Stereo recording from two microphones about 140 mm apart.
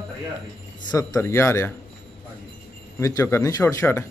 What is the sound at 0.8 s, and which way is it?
Speech, 25° left (ahead or behind).